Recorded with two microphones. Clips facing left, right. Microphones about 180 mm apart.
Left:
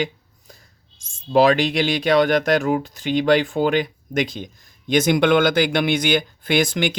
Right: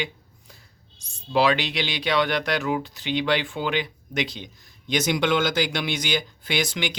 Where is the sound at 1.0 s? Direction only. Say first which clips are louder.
Left 6 dB; 45° left (ahead or behind).